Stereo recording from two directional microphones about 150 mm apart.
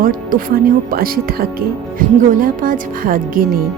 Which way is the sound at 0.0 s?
75° right (ahead or behind).